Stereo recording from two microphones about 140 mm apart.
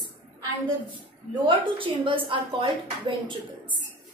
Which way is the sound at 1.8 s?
40° right (ahead or behind).